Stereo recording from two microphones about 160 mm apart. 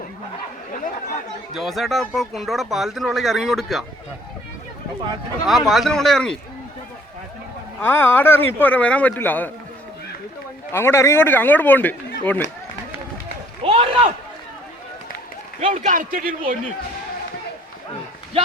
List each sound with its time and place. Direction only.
0.7 s chatter: 55° left (ahead or behind)
1.5 s speech: centre (ahead or behind)
5.5 s speech: centre (ahead or behind)
7.8 s speech: 15° left (ahead or behind)
10.7 s speech: 15° left (ahead or behind)
13.6 s a sound: 35° right (ahead or behind)
15.6 s a man's voice: 50° right (ahead or behind)